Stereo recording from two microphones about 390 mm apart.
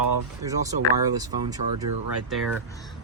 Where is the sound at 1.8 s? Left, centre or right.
Right.